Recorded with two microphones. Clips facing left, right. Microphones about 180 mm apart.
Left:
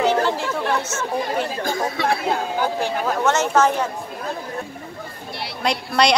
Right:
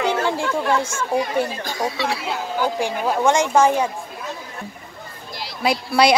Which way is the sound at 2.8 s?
10° right (ahead or behind).